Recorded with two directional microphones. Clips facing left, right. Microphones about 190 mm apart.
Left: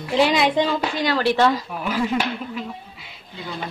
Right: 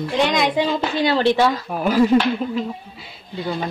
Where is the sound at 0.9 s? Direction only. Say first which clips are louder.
Right 5 dB; 25° right (ahead or behind).